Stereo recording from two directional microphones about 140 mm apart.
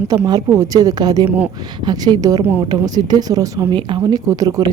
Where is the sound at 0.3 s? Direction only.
25° right (ahead or behind).